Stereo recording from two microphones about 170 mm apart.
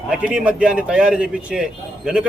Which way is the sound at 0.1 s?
5° right (ahead or behind).